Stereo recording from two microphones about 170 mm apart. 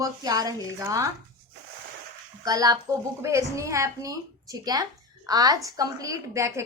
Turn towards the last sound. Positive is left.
turn(degrees=-15)  # may be behind; listen again after turning